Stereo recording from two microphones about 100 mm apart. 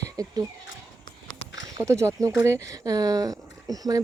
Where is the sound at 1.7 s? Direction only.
30° right (ahead or behind).